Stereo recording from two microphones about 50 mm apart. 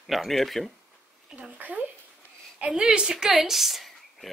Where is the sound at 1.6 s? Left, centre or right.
Right.